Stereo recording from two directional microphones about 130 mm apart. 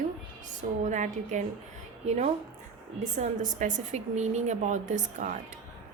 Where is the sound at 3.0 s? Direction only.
70° right (ahead or behind).